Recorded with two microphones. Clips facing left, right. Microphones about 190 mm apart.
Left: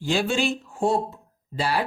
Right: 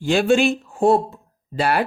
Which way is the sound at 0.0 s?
60° right (ahead or behind).